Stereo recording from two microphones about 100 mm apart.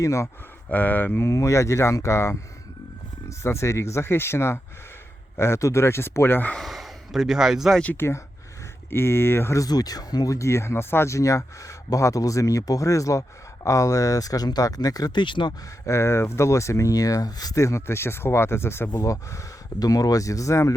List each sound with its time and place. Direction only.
0.0 s speech: 30° left (ahead or behind)
0.7 s speech: 15° left (ahead or behind)
6.6 s speech: centre (ahead or behind)
7.8 s speech: 20° left (ahead or behind)
9.6 s speech: 40° left (ahead or behind)
15.9 s speech: 25° left (ahead or behind)